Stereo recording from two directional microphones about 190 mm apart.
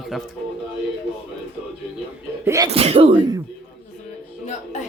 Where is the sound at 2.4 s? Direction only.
15° right (ahead or behind).